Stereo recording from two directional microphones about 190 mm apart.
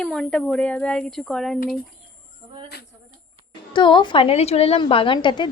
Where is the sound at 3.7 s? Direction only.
25° left (ahead or behind).